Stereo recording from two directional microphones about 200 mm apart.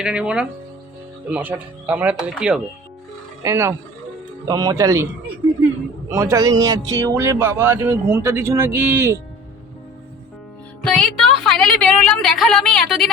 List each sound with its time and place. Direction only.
0.0 s speech: 5° right (ahead or behind)
3.4 s speech: 15° right (ahead or behind)
6.1 s speech: 15° right (ahead or behind)
10.8 s speech: 5° left (ahead or behind)